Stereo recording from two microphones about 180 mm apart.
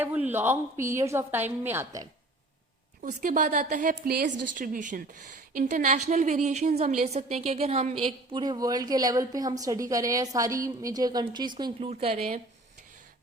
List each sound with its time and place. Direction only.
0.0 s a woman's voice: 10° right (ahead or behind)
3.0 s a woman's voice: 45° right (ahead or behind)